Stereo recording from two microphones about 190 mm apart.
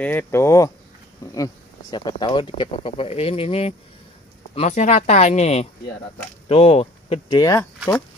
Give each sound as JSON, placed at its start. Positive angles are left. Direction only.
{"t": 0.0, "sound": "speech", "side_deg": 10}